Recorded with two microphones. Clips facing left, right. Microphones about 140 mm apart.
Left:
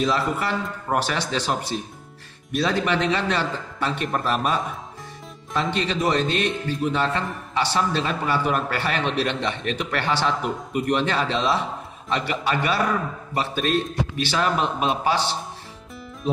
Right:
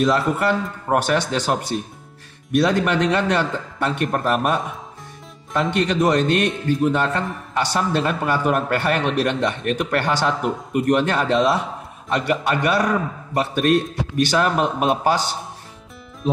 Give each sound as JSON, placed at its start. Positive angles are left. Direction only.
{"t": 0.0, "sound": "a man's voice", "side_deg": -55}